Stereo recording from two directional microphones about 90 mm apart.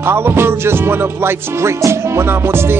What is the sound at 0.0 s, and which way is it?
Music, 25° right (ahead or behind).